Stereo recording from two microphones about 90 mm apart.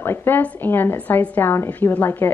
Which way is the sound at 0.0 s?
25° left (ahead or behind).